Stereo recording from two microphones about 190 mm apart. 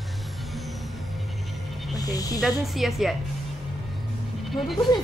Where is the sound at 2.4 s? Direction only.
Centre (ahead or behind).